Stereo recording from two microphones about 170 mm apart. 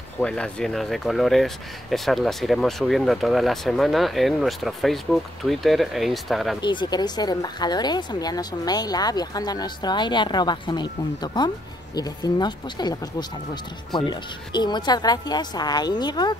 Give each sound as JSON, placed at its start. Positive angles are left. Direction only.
{"t": 0.2, "sound": "speech", "side_deg": 5}
{"t": 6.6, "sound": "speech", "side_deg": 25}
{"t": 13.9, "sound": "speech", "side_deg": 25}